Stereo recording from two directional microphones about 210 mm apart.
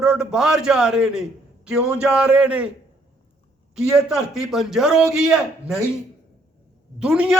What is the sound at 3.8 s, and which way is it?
A man's voice, 5° right (ahead or behind).